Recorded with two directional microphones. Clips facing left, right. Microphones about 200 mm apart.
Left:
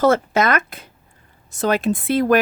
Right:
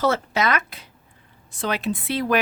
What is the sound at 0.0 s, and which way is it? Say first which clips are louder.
Speech: left 5 dB; 50° left (ahead or behind).